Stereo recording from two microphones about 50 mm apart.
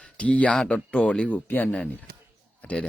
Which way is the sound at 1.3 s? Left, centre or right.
Left.